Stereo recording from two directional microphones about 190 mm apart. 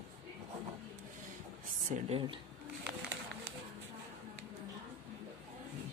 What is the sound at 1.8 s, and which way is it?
Speech, 40° right (ahead or behind).